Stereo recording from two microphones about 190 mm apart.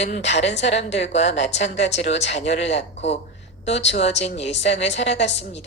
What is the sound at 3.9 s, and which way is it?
A woman's voice, 35° left (ahead or behind).